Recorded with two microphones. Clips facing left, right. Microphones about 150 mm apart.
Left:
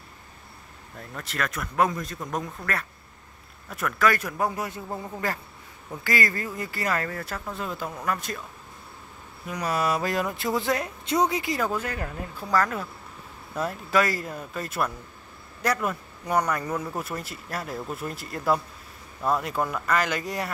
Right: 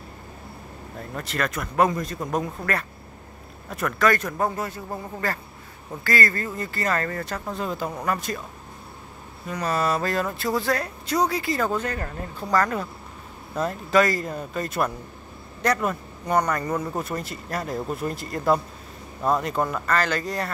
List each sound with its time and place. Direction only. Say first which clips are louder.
1.1 s speech: right 3 dB; centre (ahead or behind)
9.5 s speech: right 2 dB; 10° left (ahead or behind)
19.7 s speech: right 2 dB; 10° left (ahead or behind)